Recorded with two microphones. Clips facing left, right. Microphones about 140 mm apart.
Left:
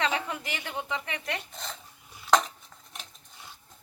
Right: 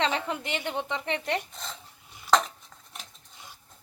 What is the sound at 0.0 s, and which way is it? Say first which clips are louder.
A woman's voice: right 2 dB; 25° right (ahead or behind).